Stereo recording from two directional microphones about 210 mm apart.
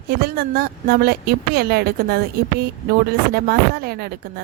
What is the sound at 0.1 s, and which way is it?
A woman's voice, 45° right (ahead or behind).